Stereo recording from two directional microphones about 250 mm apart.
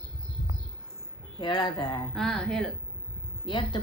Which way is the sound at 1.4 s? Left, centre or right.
Centre.